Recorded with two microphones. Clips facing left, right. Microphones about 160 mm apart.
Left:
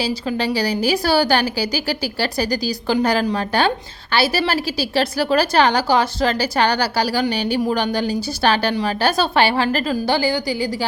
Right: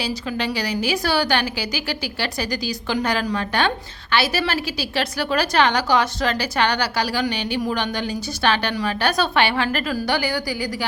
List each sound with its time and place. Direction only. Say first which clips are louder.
0.0 s a woman's voice: left 4 dB; 35° left (ahead or behind)